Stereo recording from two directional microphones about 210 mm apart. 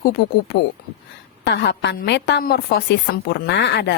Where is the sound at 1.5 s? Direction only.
55° left (ahead or behind).